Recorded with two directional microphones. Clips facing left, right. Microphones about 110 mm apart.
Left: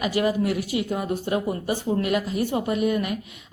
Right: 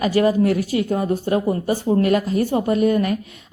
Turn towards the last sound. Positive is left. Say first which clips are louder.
# right 6 dB
turn(degrees=-40)  # may be behind; listen again after turning